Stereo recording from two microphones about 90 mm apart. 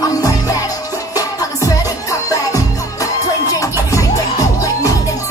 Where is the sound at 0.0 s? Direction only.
40° left (ahead or behind).